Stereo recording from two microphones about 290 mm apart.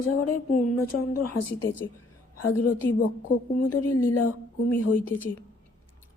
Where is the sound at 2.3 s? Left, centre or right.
Left.